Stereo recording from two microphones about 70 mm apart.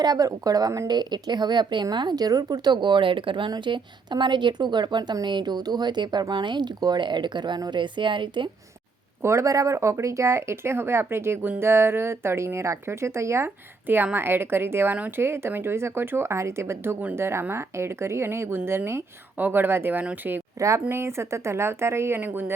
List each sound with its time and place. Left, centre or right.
0.0 s speech: right
0.9 s a woman's voice: right
4.1 s a woman's voice: right
9.2 s speech: right
13.8 s speech: right
20.6 s speech: right
20.9 s speech: right